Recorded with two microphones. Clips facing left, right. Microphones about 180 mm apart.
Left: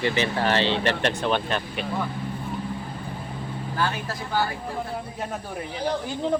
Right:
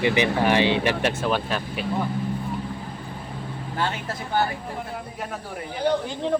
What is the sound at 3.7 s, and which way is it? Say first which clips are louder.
Speech: even; 25° right (ahead or behind).